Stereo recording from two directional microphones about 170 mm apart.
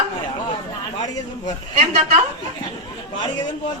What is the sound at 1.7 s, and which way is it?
Speech, 40° right (ahead or behind).